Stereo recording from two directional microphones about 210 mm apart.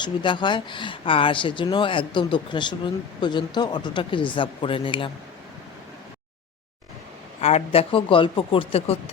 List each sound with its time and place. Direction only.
0.0 s speech: 20° left (ahead or behind)
7.4 s speech: 30° left (ahead or behind)